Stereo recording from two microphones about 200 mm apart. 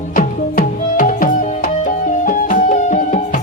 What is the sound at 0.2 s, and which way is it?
Music, 45° left (ahead or behind).